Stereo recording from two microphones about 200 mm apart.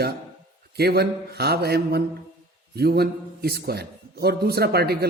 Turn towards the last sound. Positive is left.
turn(degrees=-50)  # may be behind; listen again after turning